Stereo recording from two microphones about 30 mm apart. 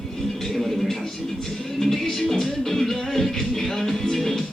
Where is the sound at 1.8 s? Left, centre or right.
Centre.